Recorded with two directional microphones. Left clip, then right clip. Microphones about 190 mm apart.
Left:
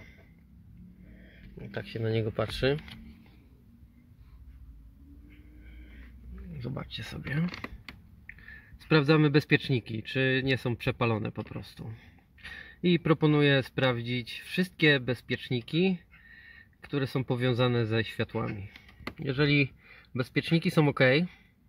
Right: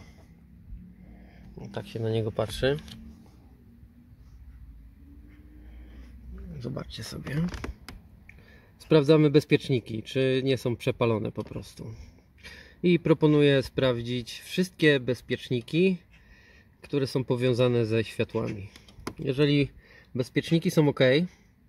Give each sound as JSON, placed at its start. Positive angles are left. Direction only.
{"t": 1.6, "sound": "speech", "side_deg": 0}
{"t": 6.6, "sound": "speech", "side_deg": 10}
{"t": 8.8, "sound": "speech", "side_deg": 15}
{"t": 19.1, "sound": "speech", "side_deg": 5}